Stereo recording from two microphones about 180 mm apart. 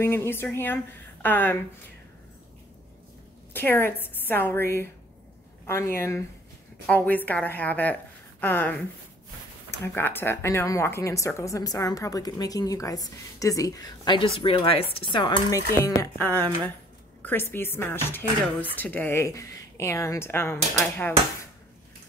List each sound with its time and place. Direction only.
0.0 s speech: 15° left (ahead or behind)
3.5 s speech: 10° left (ahead or behind)
9.9 s a woman's voice: 10° left (ahead or behind)
16.0 s speech: 10° left (ahead or behind)